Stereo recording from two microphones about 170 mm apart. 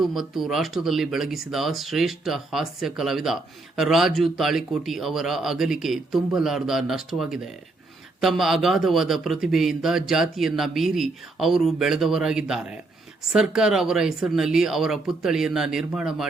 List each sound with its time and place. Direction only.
0.0 s a man's voice: centre (ahead or behind)